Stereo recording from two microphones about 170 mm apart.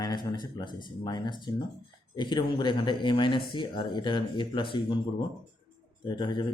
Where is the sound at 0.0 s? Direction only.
25° left (ahead or behind).